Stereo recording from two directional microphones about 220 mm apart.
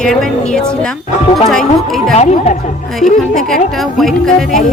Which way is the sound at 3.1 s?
Centre (ahead or behind).